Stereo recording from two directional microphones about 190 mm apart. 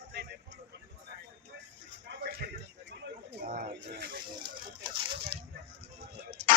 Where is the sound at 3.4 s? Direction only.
50° right (ahead or behind).